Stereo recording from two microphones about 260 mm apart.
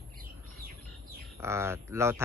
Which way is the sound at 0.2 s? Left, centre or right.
Right.